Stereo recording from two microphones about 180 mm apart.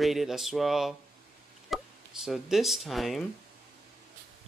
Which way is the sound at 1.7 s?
Centre (ahead or behind).